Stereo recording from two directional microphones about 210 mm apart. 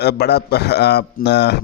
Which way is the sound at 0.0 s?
50° left (ahead or behind).